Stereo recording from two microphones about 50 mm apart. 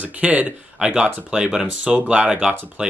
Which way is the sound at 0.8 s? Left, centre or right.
Right.